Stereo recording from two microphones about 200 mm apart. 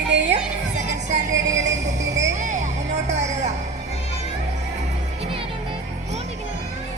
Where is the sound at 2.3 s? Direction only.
35° right (ahead or behind).